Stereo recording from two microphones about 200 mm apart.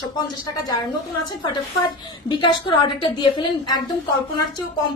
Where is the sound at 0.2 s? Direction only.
20° left (ahead or behind).